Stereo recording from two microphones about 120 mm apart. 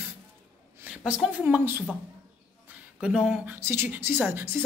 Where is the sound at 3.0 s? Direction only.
5° right (ahead or behind).